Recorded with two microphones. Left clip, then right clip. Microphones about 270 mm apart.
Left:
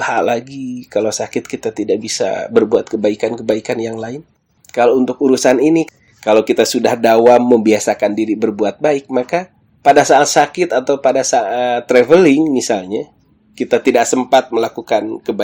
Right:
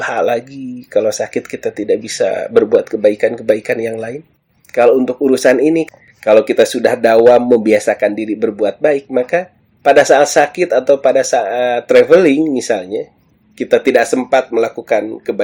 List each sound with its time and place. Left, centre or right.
0.0 s speech: centre